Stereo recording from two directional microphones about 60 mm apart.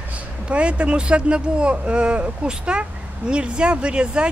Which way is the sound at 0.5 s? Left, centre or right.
Centre.